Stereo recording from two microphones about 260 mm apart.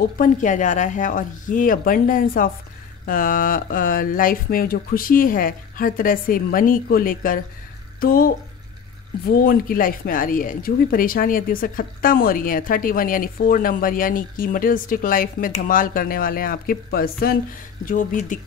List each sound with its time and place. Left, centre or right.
0.2 s speech: left